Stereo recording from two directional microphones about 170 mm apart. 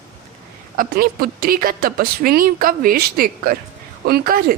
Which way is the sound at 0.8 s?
60° right (ahead or behind).